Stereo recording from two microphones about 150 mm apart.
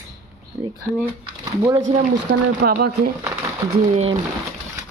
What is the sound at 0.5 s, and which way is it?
Speech, 25° right (ahead or behind).